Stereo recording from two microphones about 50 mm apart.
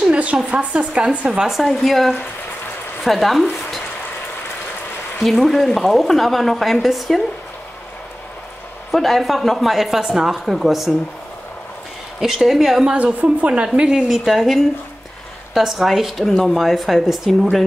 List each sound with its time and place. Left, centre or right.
0.1 s a sound: right
0.7 s speech: centre
1.1 s a woman's voice: right
1.4 s speech: centre
5.2 s speech: centre
8.9 s speech: centre
12.2 s speech: centre
12.9 s a woman's voice: right
13.7 s speech: centre